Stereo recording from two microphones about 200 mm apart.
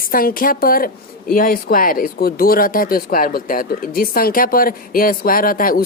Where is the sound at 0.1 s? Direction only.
45° left (ahead or behind).